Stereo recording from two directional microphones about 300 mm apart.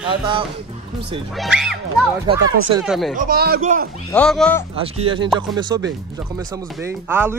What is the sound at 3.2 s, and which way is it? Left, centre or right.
Speech, right.